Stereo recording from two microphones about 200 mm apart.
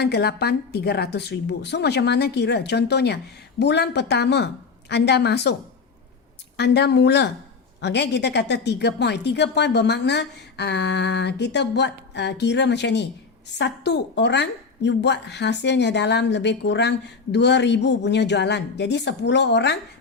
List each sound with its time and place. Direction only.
0.0 s a woman's voice: 55° left (ahead or behind)
6.6 s a woman's voice: 55° left (ahead or behind)